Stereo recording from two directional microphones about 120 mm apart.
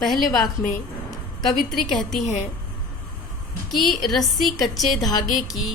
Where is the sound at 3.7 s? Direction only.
Centre (ahead or behind).